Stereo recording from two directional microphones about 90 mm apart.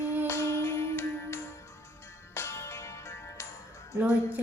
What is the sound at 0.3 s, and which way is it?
Music, 30° left (ahead or behind).